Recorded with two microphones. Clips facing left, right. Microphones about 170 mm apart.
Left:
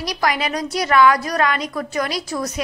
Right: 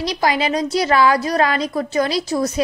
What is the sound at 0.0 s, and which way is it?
A woman's voice, 25° right (ahead or behind).